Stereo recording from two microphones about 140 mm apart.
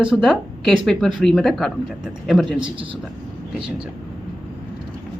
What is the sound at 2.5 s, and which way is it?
Speech, 35° right (ahead or behind).